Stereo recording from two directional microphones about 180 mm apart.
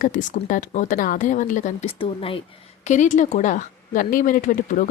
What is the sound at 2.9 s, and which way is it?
Speech, 40° left (ahead or behind).